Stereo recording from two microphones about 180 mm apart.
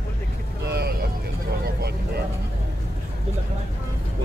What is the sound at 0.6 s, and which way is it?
Vehicle, 65° right (ahead or behind).